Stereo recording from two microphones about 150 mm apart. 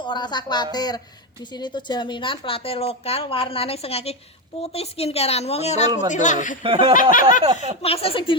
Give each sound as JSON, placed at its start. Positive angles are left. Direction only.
{"t": 0.0, "sound": "a woman's voice", "side_deg": 30}
{"t": 6.6, "sound": "speech", "side_deg": -40}
{"t": 6.9, "sound": "speech", "side_deg": 65}
{"t": 7.8, "sound": "a woman's voice", "side_deg": 40}